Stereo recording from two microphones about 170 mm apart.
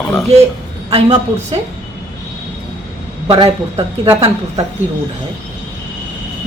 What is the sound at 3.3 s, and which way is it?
Speech, 25° right (ahead or behind).